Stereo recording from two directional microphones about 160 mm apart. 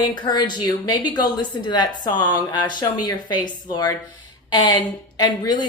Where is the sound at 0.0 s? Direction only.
25° left (ahead or behind).